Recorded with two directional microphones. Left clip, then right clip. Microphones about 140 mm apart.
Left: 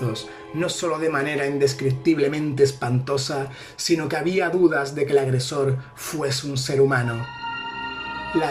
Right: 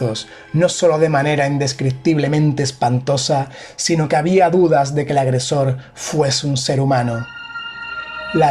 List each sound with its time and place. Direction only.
0.6 s speech: 40° right (ahead or behind)
3.8 s speech: 45° right (ahead or behind)